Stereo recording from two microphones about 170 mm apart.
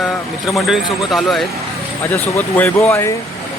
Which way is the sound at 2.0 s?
15° left (ahead or behind).